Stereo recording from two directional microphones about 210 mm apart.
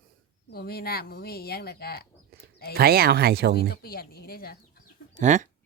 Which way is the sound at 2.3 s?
45° right (ahead or behind).